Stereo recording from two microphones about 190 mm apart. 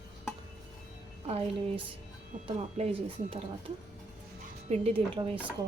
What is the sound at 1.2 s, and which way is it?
A woman's voice, 30° right (ahead or behind).